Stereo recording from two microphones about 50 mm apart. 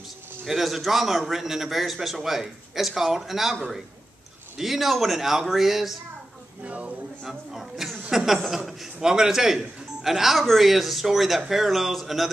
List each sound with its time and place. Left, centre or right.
0.5 s a man's voice: centre
4.6 s a man's voice: centre
6.6 s speech: right
7.2 s a man's voice: centre